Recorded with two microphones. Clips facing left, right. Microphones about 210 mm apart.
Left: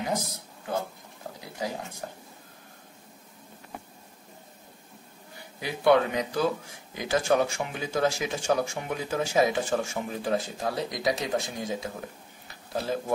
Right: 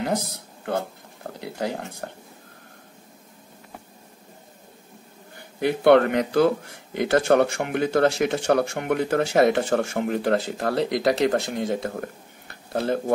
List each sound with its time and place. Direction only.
1.3 s speech: 65° right (ahead or behind)
5.6 s speech: 60° right (ahead or behind)